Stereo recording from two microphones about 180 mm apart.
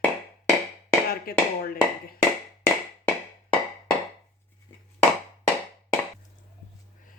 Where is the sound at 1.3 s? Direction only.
55° left (ahead or behind).